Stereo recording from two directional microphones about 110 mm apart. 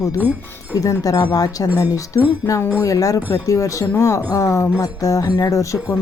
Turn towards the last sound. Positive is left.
turn(degrees=30)  # may be behind; listen again after turning